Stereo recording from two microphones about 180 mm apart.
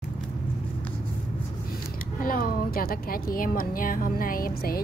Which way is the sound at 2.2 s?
55° left (ahead or behind).